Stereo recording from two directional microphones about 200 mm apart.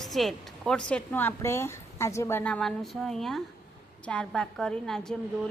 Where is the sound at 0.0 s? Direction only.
Centre (ahead or behind).